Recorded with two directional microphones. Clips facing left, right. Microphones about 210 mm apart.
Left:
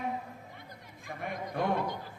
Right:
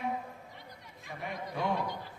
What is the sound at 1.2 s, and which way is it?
Speech, 50° left (ahead or behind).